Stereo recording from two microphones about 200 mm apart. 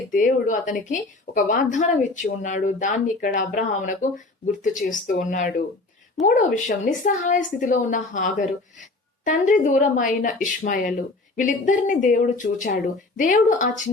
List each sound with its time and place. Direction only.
0.1 s a woman's voice: 40° left (ahead or behind)